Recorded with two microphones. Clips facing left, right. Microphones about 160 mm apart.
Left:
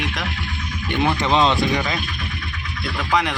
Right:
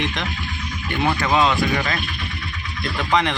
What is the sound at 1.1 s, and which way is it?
Speech, 20° left (ahead or behind).